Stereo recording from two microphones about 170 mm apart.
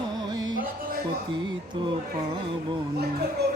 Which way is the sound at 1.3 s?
30° right (ahead or behind).